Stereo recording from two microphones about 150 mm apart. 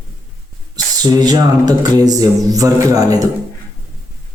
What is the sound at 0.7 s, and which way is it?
Speech, 25° right (ahead or behind).